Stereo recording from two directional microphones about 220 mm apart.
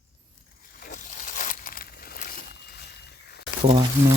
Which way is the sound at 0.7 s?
40° left (ahead or behind).